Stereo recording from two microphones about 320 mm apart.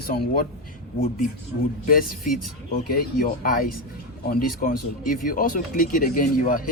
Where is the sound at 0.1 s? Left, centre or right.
Left.